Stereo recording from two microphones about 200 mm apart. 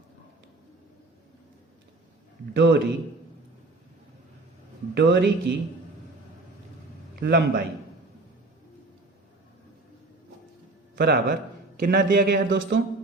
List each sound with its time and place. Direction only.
2.5 s speech: 60° right (ahead or behind)
4.9 s speech: 55° right (ahead or behind)
7.2 s speech: 55° right (ahead or behind)
10.9 s a man's voice: 55° right (ahead or behind)